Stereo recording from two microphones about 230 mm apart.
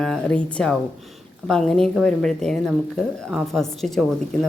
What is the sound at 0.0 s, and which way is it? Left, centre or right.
Speech, centre.